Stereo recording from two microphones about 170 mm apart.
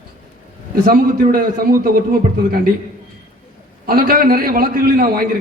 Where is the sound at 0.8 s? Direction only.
60° right (ahead or behind).